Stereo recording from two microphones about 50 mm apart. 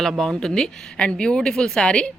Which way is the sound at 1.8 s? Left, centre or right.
Centre.